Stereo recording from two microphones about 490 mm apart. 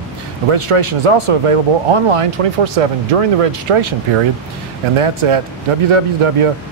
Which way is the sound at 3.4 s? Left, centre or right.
Right.